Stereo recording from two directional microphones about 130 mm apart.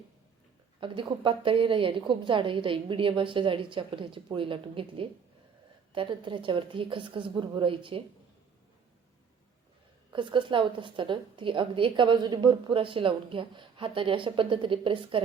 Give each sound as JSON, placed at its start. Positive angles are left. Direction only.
{"t": 0.8, "sound": "a woman's voice", "side_deg": -40}
{"t": 10.1, "sound": "a woman's voice", "side_deg": -40}